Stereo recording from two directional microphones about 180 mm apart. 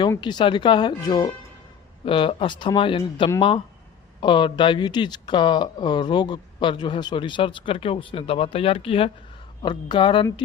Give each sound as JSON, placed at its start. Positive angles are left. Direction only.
{"t": 0.2, "sound": "speech", "side_deg": 25}